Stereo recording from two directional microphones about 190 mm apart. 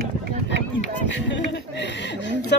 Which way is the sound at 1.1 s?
70° left (ahead or behind).